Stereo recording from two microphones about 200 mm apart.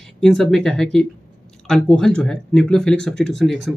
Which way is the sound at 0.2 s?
Centre (ahead or behind).